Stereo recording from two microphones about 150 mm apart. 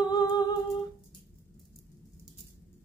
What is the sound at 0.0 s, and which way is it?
Humming, 25° left (ahead or behind).